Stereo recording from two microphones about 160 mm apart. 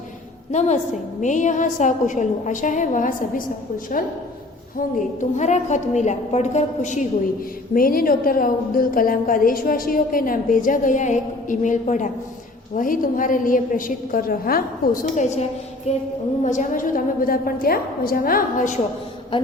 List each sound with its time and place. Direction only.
1.2 s a woman's voice: 50° left (ahead or behind)
4.9 s a woman's voice: 45° left (ahead or behind)
7.7 s a woman's voice: 65° left (ahead or behind)
15.0 s a woman's voice: 50° left (ahead or behind)